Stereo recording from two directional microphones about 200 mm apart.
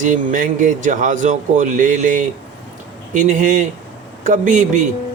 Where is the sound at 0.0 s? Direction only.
40° right (ahead or behind).